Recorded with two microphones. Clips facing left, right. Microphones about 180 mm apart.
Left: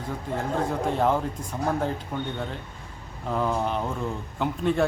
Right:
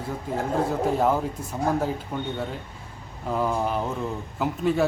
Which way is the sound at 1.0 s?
5° right (ahead or behind).